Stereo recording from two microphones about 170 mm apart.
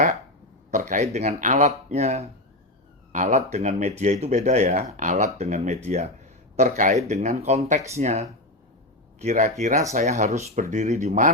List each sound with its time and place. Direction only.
0.7 s speech: 45° right (ahead or behind)
6.6 s speech: 50° right (ahead or behind)